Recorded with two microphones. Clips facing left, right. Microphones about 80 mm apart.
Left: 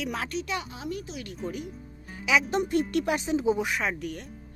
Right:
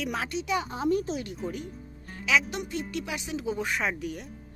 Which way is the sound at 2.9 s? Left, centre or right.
Left.